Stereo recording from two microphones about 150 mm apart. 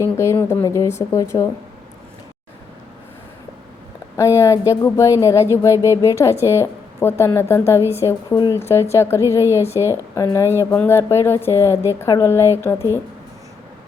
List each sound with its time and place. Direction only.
0.0 s speech: 20° left (ahead or behind)
4.2 s a woman's voice: 20° left (ahead or behind)